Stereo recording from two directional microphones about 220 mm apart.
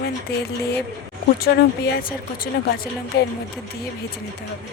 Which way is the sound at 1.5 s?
45° left (ahead or behind).